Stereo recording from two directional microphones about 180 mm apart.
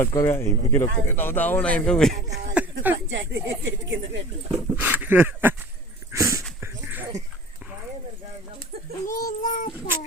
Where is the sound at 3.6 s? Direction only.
90° right.